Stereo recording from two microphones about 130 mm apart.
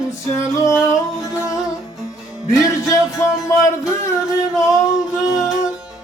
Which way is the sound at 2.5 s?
20° left (ahead or behind).